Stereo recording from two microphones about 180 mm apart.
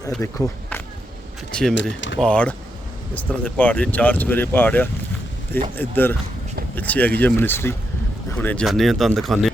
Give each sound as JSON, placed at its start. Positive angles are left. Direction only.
{"t": 0.2, "sound": "speech", "side_deg": 15}
{"t": 1.7, "sound": "speech", "side_deg": 90}
{"t": 2.2, "sound": "speech", "side_deg": 5}